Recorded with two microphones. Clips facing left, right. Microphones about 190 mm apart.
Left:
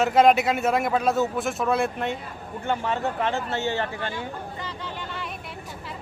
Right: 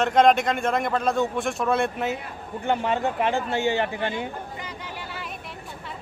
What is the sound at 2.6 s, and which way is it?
Speech, 15° right (ahead or behind).